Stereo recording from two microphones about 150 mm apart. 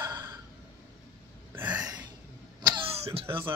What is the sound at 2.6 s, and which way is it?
Cough, 30° right (ahead or behind).